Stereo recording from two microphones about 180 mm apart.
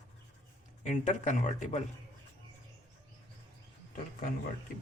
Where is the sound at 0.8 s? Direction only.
40° left (ahead or behind).